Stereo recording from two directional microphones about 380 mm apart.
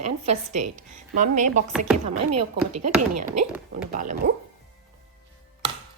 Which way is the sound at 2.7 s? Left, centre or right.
Right.